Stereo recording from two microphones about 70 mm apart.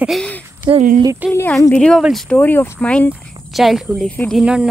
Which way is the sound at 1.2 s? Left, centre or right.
Right.